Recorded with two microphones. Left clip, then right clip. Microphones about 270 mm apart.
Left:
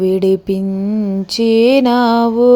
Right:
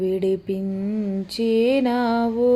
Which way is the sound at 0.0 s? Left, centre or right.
Left.